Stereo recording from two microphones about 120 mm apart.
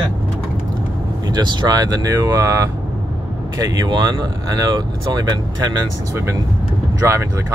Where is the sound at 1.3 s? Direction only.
40° right (ahead or behind).